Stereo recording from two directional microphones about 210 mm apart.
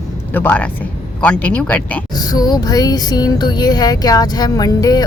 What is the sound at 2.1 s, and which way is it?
Music, 20° left (ahead or behind).